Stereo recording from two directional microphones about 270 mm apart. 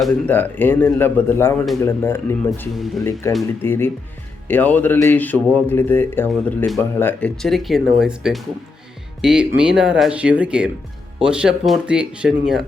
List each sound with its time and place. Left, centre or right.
0.0 s speech: centre
3.0 s speech: centre